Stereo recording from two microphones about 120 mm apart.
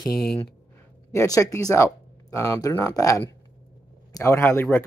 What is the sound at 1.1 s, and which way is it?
Speech, 30° left (ahead or behind).